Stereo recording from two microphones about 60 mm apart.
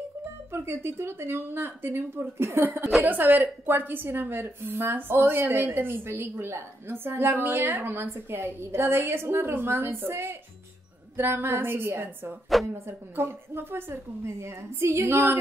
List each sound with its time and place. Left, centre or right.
0.5 s a woman's voice: right
3.1 s a woman's voice: right